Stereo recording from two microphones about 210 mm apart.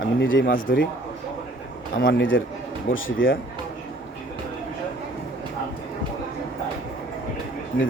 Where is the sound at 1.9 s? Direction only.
65° left (ahead or behind).